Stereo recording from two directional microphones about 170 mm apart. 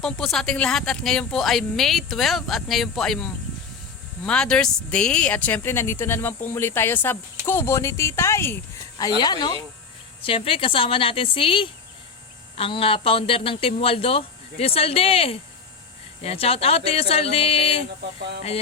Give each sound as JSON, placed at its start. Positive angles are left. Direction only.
{"t": 0.0, "sound": "speech", "side_deg": 5}